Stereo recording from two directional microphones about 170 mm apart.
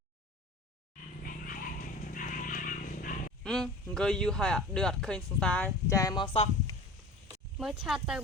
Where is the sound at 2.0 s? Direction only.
50° left (ahead or behind).